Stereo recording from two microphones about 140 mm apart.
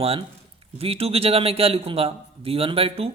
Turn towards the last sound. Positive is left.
turn(degrees=-45)  # may be behind; listen again after turning